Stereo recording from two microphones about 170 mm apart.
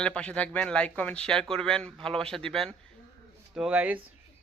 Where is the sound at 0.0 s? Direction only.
5° left (ahead or behind).